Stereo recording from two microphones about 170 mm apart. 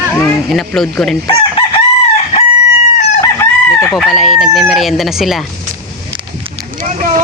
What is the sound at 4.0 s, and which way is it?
Speech, centre (ahead or behind).